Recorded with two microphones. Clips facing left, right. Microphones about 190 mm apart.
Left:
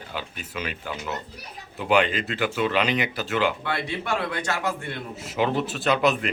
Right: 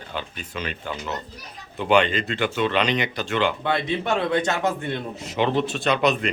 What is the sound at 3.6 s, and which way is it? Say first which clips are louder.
A man's voice: right 5 dB; 20° right (ahead or behind).